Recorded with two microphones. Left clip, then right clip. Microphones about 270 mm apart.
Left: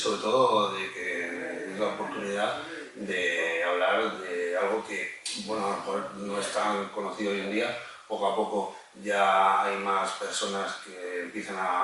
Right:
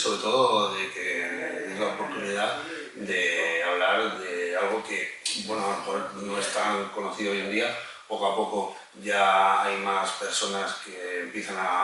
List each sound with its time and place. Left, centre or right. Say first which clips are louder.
0.0 s a sound: right 2 dB; centre
0.3 s speech: right 1 dB; left
1.8 s a man's voice: right 1 dB; centre
9.0 s speech: right 2 dB; centre